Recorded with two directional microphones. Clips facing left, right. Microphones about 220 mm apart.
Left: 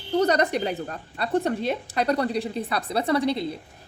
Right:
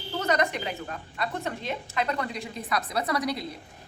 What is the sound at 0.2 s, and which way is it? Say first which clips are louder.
A woman's voice: left 5 dB; 35° left (ahead or behind).